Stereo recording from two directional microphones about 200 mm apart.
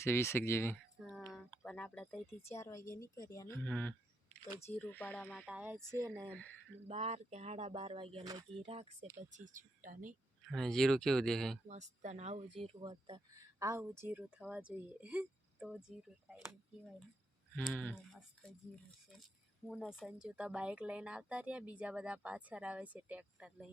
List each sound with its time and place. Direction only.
0.0 s a woman's voice: 15° left (ahead or behind)
0.9 s a sound: centre (ahead or behind)
2.5 s a woman's voice: 15° left (ahead or behind); by 6.3 s 15° right (ahead or behind)
6.8 s speech: 30° right (ahead or behind)
8.6 s speech: 30° right (ahead or behind)
10.5 s speech: centre (ahead or behind)
11.7 s speech: 35° right (ahead or behind)
13.6 s speech: 15° right (ahead or behind)
17.7 s speech: 5° left (ahead or behind)
19.6 s speech: centre (ahead or behind)